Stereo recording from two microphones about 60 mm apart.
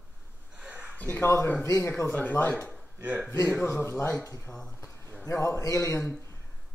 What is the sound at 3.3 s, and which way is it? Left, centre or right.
Speech, left.